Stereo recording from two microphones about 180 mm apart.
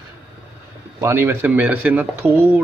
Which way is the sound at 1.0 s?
15° right (ahead or behind).